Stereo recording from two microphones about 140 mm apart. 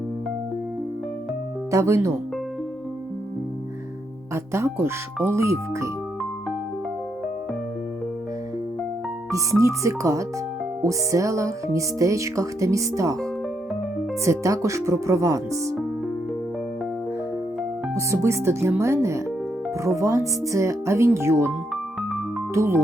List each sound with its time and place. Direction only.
1.7 s music: 20° right (ahead or behind)
4.5 s music: 20° right (ahead or behind)
9.3 s music: 20° right (ahead or behind)
14.3 s music: 20° right (ahead or behind)
17.9 s music: 20° right (ahead or behind)
22.5 s music: 20° right (ahead or behind)